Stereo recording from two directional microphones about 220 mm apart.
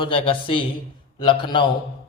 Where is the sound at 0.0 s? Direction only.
25° left (ahead or behind).